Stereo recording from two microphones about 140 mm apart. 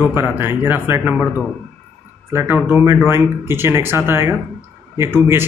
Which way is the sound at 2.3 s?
15° right (ahead or behind).